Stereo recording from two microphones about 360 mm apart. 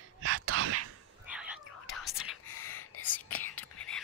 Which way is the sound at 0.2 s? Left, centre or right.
Right.